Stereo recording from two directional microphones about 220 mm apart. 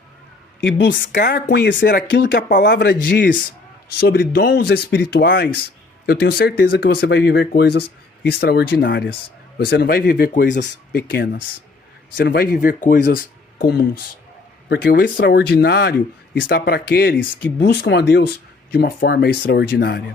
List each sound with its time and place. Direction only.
0.6 s speech: 55° left (ahead or behind)